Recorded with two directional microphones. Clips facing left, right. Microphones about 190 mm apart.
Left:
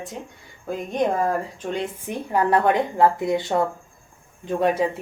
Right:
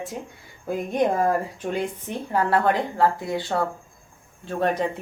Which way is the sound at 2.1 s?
15° left (ahead or behind).